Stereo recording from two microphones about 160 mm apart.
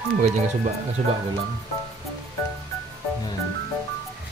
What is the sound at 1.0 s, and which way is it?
Speech, 45° right (ahead or behind).